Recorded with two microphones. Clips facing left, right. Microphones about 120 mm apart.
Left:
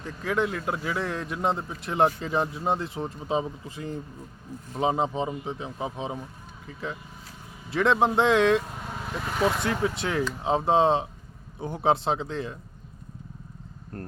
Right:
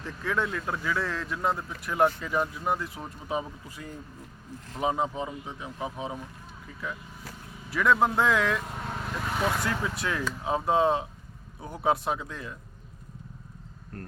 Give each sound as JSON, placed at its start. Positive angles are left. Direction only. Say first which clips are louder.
{"t": 0.0, "sound": "a man's voice", "louder": "left 3 dB", "side_deg": 20}
{"t": 7.7, "sound": "a man's voice", "louder": "left 1 dB", "side_deg": 25}
{"t": 9.3, "sound": "vehicle", "louder": "left 4 dB", "side_deg": 0}
{"t": 9.6, "sound": "a man's voice", "louder": "left 4 dB", "side_deg": 25}